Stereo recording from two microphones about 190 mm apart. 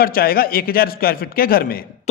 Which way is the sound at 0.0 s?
50° left (ahead or behind).